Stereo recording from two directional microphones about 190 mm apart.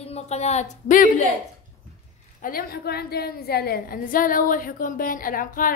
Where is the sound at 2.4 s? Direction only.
50° left (ahead or behind).